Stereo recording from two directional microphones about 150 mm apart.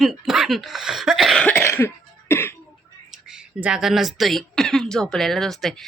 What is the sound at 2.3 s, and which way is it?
Cough, 15° left (ahead or behind).